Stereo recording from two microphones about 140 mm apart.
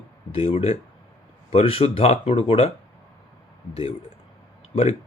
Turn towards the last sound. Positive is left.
turn(degrees=45)  # may be behind; listen again after turning